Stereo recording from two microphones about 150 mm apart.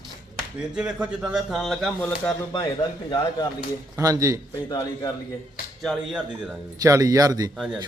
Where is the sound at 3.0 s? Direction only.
25° left (ahead or behind).